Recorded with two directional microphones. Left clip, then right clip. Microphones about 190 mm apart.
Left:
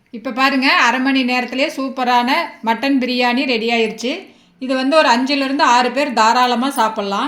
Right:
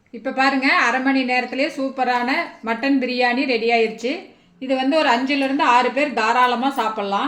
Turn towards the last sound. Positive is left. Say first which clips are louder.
# left 4 dB
turn(degrees=45)  # may be behind; listen again after turning